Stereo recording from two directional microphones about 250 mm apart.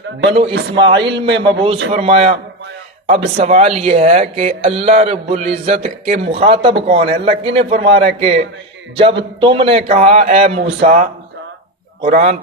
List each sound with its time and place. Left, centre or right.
0.3 s speech: right